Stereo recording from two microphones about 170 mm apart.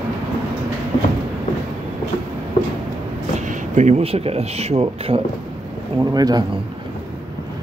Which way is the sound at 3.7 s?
40° right (ahead or behind).